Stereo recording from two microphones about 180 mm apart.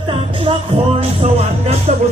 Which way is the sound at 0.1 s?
30° right (ahead or behind).